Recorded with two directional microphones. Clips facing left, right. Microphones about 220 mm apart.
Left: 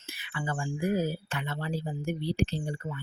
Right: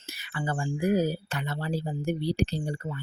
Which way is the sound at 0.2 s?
40° right (ahead or behind).